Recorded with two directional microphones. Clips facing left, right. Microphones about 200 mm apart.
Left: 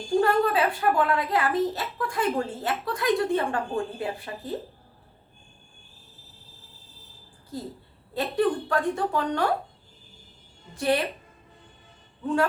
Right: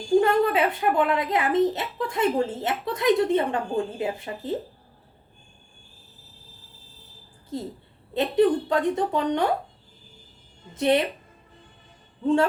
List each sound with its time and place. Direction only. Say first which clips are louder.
0.2 s a child's voice: even; 20° right (ahead or behind)
8.1 s a child's voice: right 4 dB; 20° right (ahead or behind)
10.8 s a child's voice: right 3 dB; 20° right (ahead or behind)
12.2 s a child's voice: right 4 dB; 25° right (ahead or behind)